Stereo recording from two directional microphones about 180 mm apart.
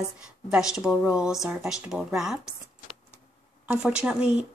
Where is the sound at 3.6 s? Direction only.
5° right (ahead or behind).